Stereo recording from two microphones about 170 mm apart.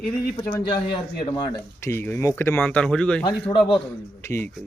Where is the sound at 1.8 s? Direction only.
15° left (ahead or behind).